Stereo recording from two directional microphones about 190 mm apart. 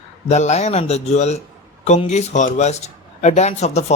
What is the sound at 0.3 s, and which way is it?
A man's voice, 35° left (ahead or behind).